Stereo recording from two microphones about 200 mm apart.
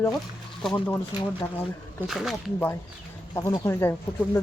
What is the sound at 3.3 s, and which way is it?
Speech, 20° left (ahead or behind).